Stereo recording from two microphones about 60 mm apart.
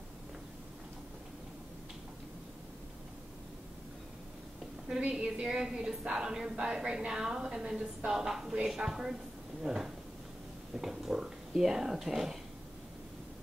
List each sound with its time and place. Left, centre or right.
5.1 s a woman's voice: centre